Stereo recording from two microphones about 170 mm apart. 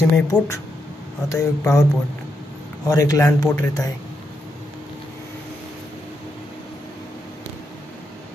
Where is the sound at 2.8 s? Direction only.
20° left (ahead or behind).